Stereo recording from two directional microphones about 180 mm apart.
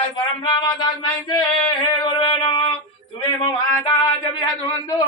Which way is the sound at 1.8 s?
25° left (ahead or behind).